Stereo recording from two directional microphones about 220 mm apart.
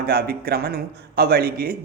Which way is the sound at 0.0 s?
45° right (ahead or behind).